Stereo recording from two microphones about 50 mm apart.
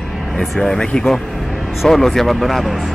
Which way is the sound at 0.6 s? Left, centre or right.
Centre.